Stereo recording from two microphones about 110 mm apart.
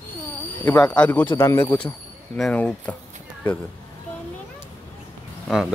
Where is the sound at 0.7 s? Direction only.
10° left (ahead or behind).